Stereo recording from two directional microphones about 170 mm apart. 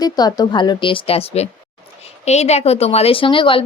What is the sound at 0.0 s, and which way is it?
Speech, 25° left (ahead or behind).